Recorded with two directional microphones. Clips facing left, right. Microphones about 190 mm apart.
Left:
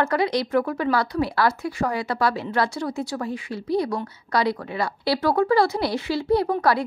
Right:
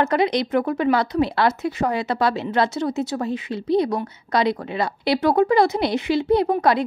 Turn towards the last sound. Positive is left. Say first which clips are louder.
# right 2 dB
turn(degrees=-20)  # may be behind; listen again after turning